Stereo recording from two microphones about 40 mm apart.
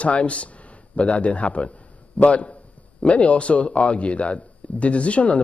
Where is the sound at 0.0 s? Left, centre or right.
Left.